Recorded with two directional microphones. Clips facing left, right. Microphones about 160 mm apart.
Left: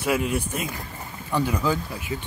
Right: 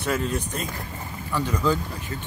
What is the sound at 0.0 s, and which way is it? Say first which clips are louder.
Speech: left 2 dB; 10° left (ahead or behind).